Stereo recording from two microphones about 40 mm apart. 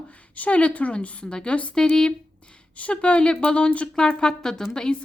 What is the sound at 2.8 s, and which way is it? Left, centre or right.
Speech, left.